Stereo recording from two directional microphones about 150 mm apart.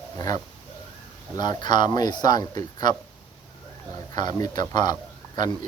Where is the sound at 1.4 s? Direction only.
30° left (ahead or behind).